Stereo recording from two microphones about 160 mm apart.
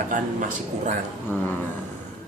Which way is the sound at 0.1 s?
55° right (ahead or behind).